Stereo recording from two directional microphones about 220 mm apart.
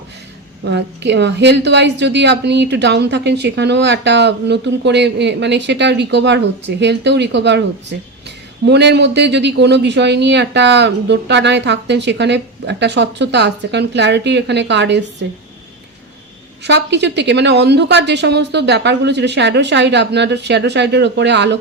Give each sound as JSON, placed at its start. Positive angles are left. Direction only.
{"t": 0.6, "sound": "a woman's voice", "side_deg": -50}
{"t": 16.6, "sound": "a woman's voice", "side_deg": -50}